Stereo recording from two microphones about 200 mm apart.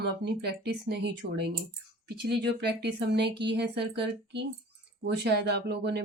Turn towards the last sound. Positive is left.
turn(degrees=-55)  # may be behind; listen again after turning